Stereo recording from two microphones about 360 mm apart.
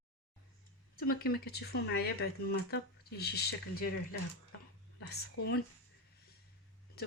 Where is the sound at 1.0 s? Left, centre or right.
Left.